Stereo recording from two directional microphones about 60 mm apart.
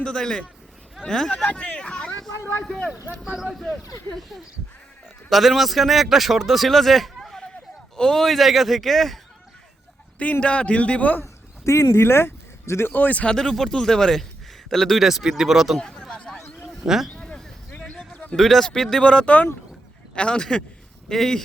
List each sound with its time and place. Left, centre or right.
0.0 s speech: centre
1.5 s vehicle: left
3.5 s speech: centre
5.3 s speech: centre
10.4 s a man's voice: centre
11.2 s speech: left
12.9 s a man's voice: left
13.2 s speech: centre
15.0 s speech: centre
15.8 s a sound: centre
16.8 s speech: centre
17.2 s a sound: centre
18.3 s speech: centre